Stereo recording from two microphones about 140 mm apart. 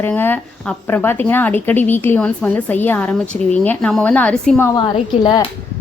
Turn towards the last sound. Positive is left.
turn(degrees=35)  # may be behind; listen again after turning